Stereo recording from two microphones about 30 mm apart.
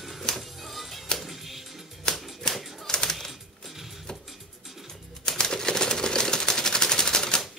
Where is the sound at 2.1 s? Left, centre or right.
Left.